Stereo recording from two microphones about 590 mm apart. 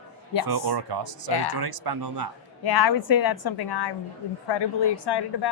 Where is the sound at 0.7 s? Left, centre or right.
Right.